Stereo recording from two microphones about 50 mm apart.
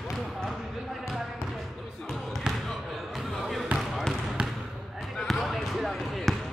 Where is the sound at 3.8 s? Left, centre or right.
Centre.